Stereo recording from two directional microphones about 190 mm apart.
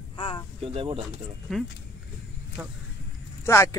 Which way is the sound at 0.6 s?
30° right (ahead or behind).